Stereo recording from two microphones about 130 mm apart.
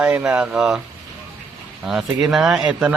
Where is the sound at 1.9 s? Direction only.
Centre (ahead or behind).